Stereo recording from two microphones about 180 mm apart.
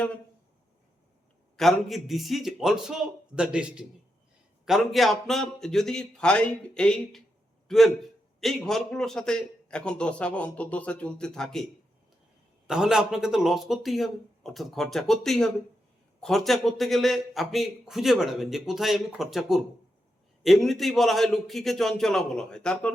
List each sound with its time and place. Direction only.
1.5 s a man's voice: centre (ahead or behind)
12.6 s a man's voice: 5° right (ahead or behind)